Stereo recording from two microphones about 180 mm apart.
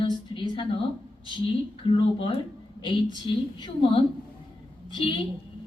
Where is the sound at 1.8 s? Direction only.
30° left (ahead or behind).